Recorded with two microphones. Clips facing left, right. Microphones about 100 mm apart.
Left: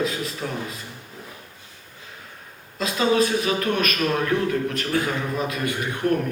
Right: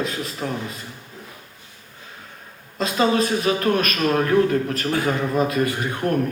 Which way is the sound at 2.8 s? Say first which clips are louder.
Right 1 dB; 35° right (ahead or behind).